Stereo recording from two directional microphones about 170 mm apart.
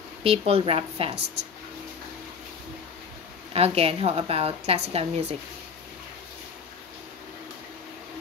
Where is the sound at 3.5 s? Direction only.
35° right (ahead or behind).